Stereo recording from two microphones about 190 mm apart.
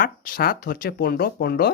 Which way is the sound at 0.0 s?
50° left (ahead or behind).